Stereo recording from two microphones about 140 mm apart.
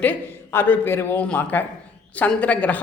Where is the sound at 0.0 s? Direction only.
15° left (ahead or behind).